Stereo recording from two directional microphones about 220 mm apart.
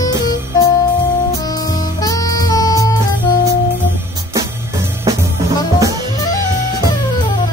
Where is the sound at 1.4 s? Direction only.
15° left (ahead or behind).